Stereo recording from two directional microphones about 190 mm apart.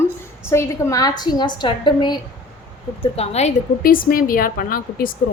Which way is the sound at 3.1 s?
35° left (ahead or behind).